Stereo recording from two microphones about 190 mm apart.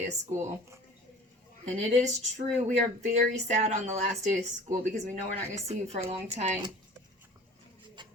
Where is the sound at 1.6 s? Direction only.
40° right (ahead or behind).